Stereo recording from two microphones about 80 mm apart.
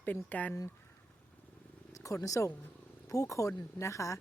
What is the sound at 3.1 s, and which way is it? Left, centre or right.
Speech, left.